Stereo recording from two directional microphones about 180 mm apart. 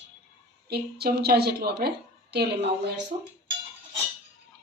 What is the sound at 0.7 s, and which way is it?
A woman's voice, 60° right (ahead or behind).